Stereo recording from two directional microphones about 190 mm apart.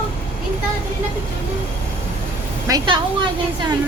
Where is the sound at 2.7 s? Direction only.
20° right (ahead or behind).